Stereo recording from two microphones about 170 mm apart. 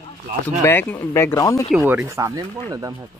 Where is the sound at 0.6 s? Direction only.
15° left (ahead or behind).